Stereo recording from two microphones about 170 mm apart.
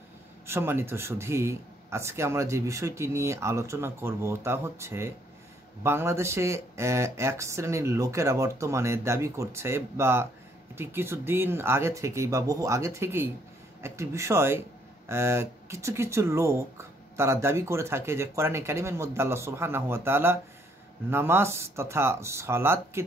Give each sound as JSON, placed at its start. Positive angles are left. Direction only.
{"t": 0.5, "sound": "speech", "side_deg": -15}